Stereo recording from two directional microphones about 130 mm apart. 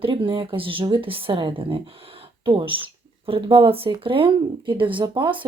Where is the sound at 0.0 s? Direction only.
40° right (ahead or behind).